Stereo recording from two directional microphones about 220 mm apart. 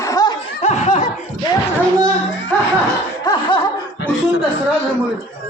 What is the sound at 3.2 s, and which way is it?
Laughter, 20° left (ahead or behind).